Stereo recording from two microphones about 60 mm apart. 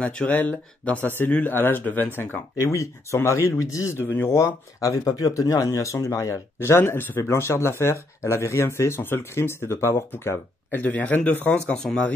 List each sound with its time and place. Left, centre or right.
0.0 s a man's voice: centre
0.4 s speech: left
2.6 s speech: left
4.0 s speech: left
4.4 s speech: left
6.6 s speech: left
10.8 s a man's voice: left
11.4 s speech: centre